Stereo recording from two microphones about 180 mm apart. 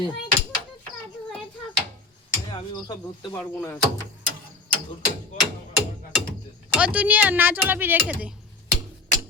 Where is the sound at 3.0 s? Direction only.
25° left (ahead or behind).